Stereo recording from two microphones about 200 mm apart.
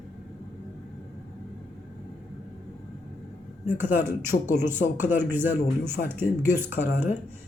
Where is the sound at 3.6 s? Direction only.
10° right (ahead or behind).